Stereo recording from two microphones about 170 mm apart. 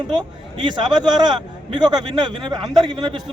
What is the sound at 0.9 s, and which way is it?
A man's voice, 25° right (ahead or behind).